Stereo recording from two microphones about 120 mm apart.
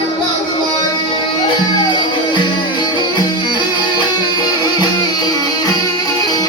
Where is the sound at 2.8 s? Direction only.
40° left (ahead or behind).